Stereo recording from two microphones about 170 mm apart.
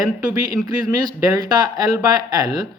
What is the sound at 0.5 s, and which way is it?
A man's voice, 20° right (ahead or behind).